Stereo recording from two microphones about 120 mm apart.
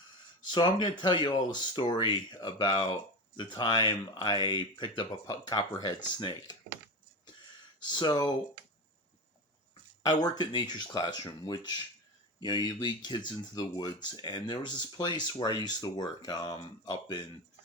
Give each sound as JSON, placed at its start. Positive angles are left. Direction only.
{"t": 0.5, "sound": "speech", "side_deg": 40}
{"t": 7.9, "sound": "speech", "side_deg": 40}
{"t": 10.0, "sound": "speech", "side_deg": 35}